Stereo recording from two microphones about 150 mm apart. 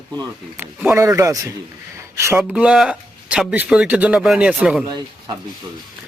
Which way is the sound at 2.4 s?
5° right (ahead or behind).